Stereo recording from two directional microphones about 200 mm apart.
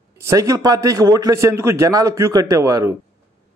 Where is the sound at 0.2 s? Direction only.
15° right (ahead or behind).